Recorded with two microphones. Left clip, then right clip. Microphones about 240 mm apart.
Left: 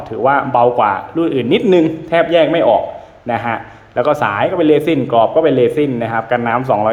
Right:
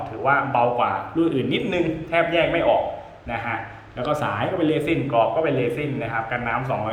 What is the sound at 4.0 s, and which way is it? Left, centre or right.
A man's voice, centre.